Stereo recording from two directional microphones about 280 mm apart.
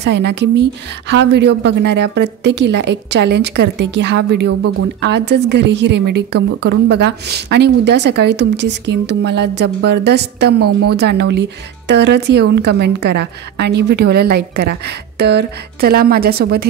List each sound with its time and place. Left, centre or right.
0.0 s a woman's voice: right